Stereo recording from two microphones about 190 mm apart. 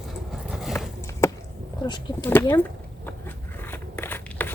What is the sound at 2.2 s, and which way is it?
Speech, 10° left (ahead or behind).